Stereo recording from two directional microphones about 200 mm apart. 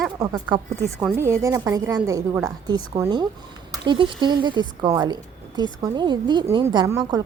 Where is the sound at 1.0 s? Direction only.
10° right (ahead or behind).